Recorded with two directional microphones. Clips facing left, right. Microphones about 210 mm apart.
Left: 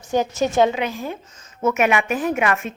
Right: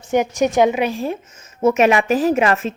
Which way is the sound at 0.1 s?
20° right (ahead or behind).